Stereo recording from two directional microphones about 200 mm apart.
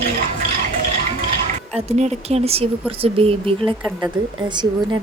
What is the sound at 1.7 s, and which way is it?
Speech, 35° right (ahead or behind).